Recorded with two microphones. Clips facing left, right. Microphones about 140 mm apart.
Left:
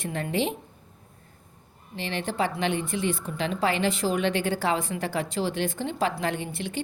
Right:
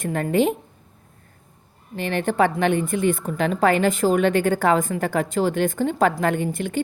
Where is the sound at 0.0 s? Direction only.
50° right (ahead or behind).